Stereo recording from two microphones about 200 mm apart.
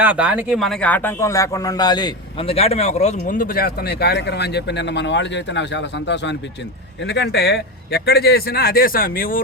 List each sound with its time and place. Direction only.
0.0 s speech: 5° right (ahead or behind); by 9.4 s 45° left (ahead or behind)